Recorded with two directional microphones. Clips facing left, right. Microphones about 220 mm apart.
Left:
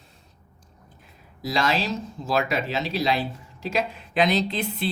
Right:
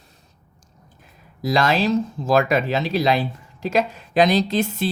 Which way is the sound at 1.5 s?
55° right (ahead or behind).